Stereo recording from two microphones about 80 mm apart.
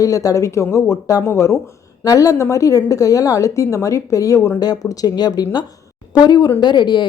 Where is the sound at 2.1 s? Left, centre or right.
Left.